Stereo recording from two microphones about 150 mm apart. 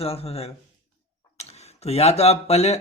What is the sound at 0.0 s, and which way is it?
Speech, 40° left (ahead or behind).